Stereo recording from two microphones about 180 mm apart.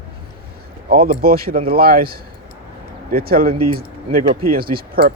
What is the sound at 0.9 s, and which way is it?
Speech, 55° right (ahead or behind).